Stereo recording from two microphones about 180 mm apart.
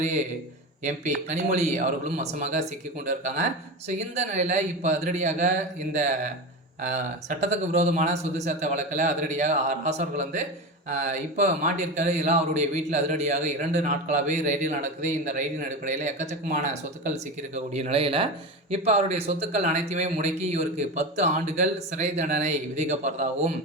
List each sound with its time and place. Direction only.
0.9 s a man's voice: 40° right (ahead or behind)